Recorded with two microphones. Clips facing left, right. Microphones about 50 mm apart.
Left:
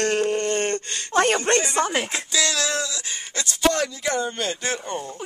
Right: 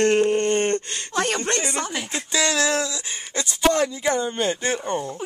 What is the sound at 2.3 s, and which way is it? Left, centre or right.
Speech, right.